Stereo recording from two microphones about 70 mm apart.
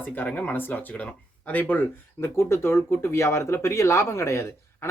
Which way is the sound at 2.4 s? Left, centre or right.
Left.